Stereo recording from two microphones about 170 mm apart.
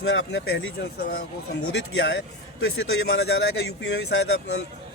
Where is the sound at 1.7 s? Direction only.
85° left.